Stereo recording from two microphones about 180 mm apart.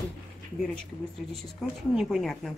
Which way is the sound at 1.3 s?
Centre (ahead or behind).